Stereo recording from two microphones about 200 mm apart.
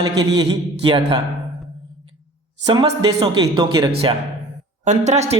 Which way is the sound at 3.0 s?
20° right (ahead or behind).